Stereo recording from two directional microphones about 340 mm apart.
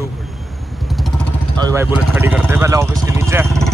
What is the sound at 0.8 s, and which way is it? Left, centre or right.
Vehicle, centre.